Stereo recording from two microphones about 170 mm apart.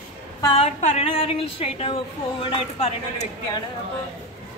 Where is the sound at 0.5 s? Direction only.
40° left (ahead or behind).